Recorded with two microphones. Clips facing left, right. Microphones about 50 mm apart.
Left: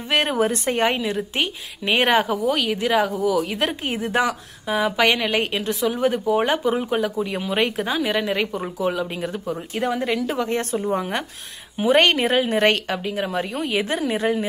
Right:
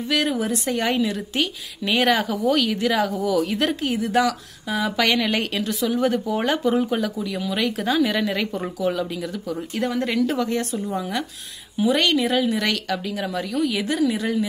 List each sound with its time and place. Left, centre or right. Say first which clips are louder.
0.1 s a woman's voice: left 3 dB; left
2.4 s a woman's voice: right 1 dB; centre
3.8 s a woman's voice: right 1 dB; left
7.2 s a woman's voice: left 3 dB; left
7.9 s a woman's voice: right 1 dB; centre
9.8 s speech: right 1 dB; centre
10.3 s a woman's voice: even; left